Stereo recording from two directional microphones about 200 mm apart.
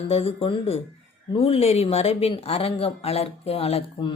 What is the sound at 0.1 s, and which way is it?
Speech, 30° left (ahead or behind).